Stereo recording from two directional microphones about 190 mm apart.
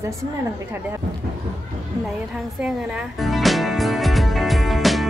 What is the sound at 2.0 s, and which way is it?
Music, 5° right (ahead or behind).